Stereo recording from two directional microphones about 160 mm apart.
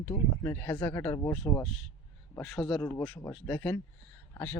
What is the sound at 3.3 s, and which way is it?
Speech, 10° left (ahead or behind).